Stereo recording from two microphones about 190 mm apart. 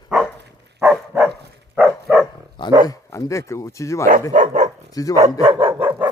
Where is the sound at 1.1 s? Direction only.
15° right (ahead or behind).